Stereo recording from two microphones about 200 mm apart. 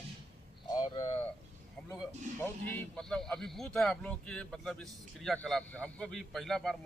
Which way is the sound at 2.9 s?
5° left (ahead or behind).